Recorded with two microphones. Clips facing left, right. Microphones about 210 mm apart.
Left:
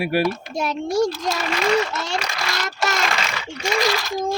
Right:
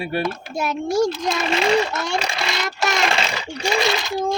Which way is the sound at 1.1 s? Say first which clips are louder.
Right 2 dB; 20° right (ahead or behind).